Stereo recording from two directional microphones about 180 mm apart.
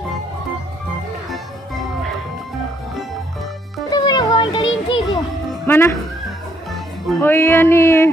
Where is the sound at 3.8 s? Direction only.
20° left (ahead or behind).